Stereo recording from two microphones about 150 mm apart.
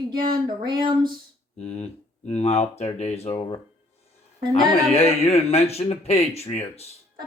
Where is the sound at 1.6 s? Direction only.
45° left (ahead or behind).